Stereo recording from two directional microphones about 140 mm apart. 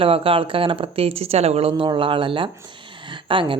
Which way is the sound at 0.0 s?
40° right (ahead or behind).